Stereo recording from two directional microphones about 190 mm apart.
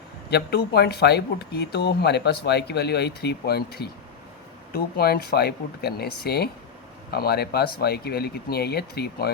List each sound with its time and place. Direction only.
0.3 s speech: 60° left (ahead or behind)